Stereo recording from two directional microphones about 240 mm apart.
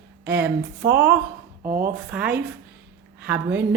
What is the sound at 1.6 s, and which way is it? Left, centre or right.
Speech, right.